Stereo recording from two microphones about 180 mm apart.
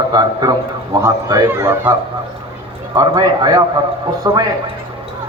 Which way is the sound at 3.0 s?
20° right (ahead or behind).